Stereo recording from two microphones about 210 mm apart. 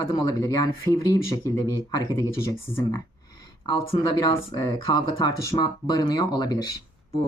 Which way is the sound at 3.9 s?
25° left (ahead or behind).